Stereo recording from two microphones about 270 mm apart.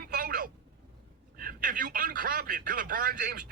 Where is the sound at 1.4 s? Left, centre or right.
Right.